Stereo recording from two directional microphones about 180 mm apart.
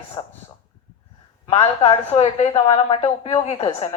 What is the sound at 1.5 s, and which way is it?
A woman's voice, 30° left (ahead or behind).